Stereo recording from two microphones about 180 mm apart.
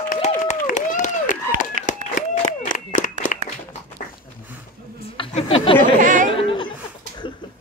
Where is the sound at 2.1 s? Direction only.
45° left (ahead or behind).